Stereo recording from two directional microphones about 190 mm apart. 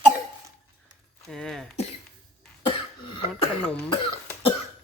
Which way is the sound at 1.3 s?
5° left (ahead or behind).